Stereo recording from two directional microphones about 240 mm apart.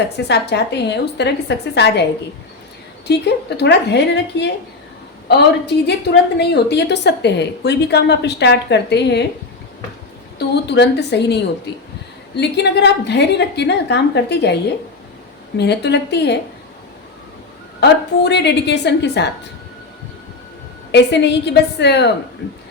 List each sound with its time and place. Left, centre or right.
0.3 s a woman's voice: left
3.1 s a woman's voice: left
10.3 s a woman's voice: left
12.4 s a woman's voice: left
17.7 s a woman's voice: left
20.9 s a woman's voice: left